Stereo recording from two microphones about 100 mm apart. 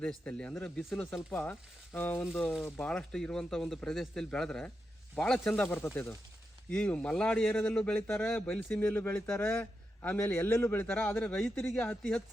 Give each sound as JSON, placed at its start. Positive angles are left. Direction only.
{"t": 0.0, "sound": "a man's voice", "side_deg": 10}
{"t": 1.3, "sound": "speech", "side_deg": 20}
{"t": 2.4, "sound": "a man's voice", "side_deg": 5}
{"t": 5.6, "sound": "speech", "side_deg": 25}
{"t": 6.7, "sound": "a man's voice", "side_deg": 10}